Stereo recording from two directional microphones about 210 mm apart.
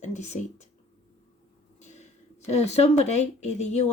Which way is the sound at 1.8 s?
35° left (ahead or behind).